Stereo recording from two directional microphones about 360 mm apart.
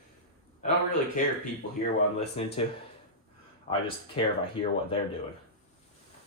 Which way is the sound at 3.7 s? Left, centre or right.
Centre.